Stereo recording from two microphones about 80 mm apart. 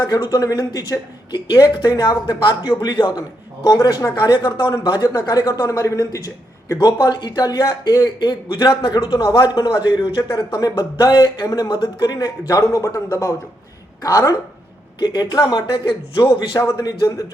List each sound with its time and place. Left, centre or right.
0.0 s speech: left
2.0 s a man's voice: left
6.7 s a man's voice: left
9.0 s a man's voice: left
14.9 s a man's voice: left